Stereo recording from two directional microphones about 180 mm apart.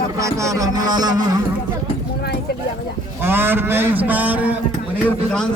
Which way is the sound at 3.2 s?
10° right (ahead or behind).